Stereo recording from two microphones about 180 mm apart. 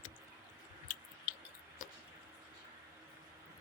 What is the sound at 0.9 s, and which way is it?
Chewing, 50° left (ahead or behind).